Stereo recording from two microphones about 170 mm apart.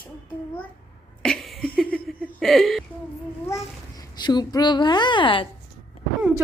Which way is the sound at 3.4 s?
20° left (ahead or behind).